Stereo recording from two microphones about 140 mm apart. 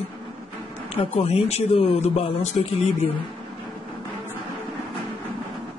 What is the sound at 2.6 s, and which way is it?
Speech, 60° left (ahead or behind).